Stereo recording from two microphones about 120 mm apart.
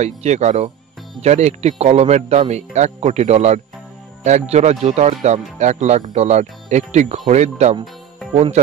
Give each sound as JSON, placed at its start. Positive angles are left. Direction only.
{"t": 0.0, "sound": "speech", "side_deg": -70}